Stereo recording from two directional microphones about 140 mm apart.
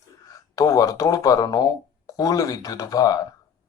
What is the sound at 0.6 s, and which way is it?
Speech, 25° left (ahead or behind).